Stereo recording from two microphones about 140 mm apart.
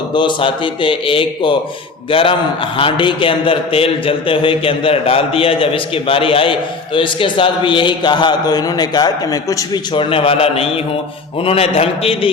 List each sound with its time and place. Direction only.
0.1 s a man's voice: 35° left (ahead or behind)